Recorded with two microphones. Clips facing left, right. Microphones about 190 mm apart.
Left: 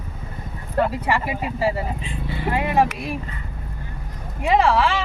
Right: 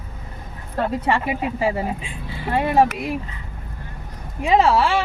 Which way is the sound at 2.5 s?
35° right (ahead or behind).